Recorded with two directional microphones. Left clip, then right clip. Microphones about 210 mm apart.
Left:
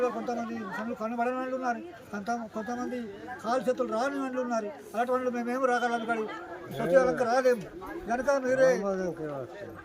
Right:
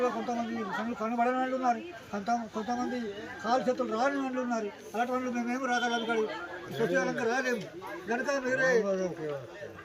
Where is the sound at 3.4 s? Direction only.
Centre (ahead or behind); by 8.8 s 25° left (ahead or behind).